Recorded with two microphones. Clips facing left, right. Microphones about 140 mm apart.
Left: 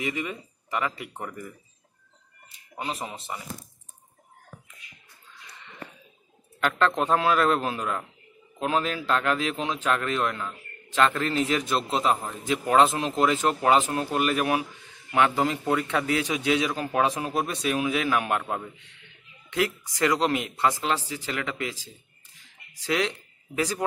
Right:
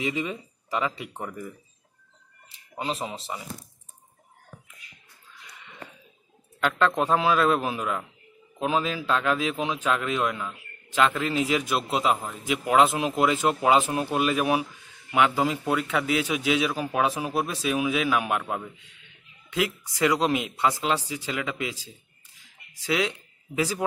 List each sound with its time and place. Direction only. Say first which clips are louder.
0.0 s speech: right 2 dB; 15° right (ahead or behind)
1.1 s speech: right 1 dB; 5° right (ahead or behind)
2.9 s speech: right 3 dB; 20° right (ahead or behind)
7.0 s a man's voice: right 1 dB; 15° right (ahead or behind)
19.5 s a man's voice: left 1 dB; 10° right (ahead or behind)